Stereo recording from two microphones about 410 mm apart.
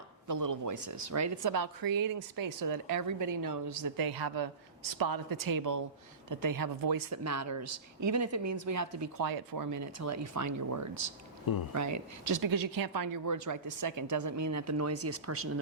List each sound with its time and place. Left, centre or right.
0.3 s a woman's voice: right
7.1 s speech: right
9.2 s a woman's voice: right